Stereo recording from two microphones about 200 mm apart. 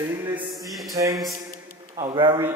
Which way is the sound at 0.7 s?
Centre (ahead or behind).